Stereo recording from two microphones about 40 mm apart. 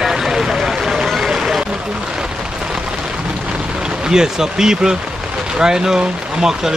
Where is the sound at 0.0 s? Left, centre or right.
Centre.